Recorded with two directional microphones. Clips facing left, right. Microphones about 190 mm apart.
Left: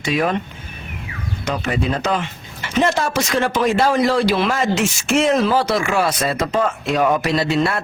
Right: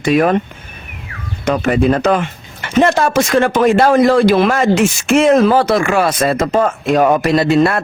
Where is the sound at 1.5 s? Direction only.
55° right (ahead or behind).